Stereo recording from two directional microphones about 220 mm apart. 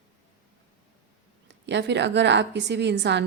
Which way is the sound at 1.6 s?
50° right (ahead or behind).